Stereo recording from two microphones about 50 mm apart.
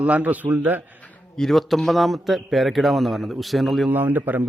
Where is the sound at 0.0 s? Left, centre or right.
Right.